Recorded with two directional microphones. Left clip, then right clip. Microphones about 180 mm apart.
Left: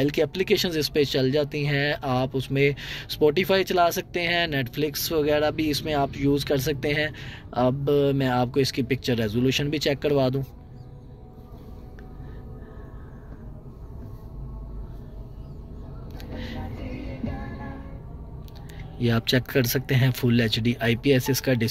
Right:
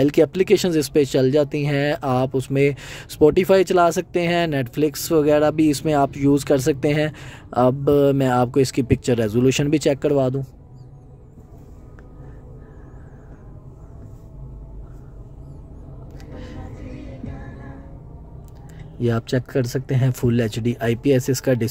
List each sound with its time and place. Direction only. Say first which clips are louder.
0.0 s speech: right 7 dB; 55° right (ahead or behind)
16.2 s vehicle: left 2 dB; 40° right (ahead or behind)
18.9 s speech: right 1 dB; 40° right (ahead or behind)